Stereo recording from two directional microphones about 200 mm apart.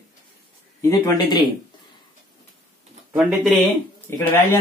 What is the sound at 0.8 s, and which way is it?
Speech, 20° left (ahead or behind).